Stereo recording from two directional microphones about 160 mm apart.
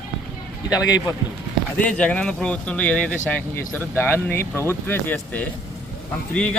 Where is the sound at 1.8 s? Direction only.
5° left (ahead or behind).